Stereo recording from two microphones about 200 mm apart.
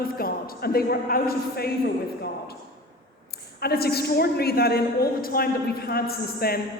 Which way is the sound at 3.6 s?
50° left (ahead or behind).